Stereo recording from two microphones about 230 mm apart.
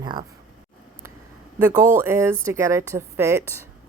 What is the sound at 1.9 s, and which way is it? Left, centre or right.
Speech, centre.